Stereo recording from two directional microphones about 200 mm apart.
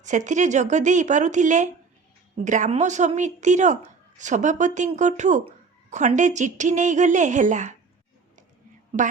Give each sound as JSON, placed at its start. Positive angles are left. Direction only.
{"t": 0.0, "sound": "speech", "side_deg": -35}